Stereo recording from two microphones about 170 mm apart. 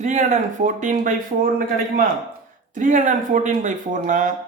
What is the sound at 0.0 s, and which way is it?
Speech, 45° right (ahead or behind).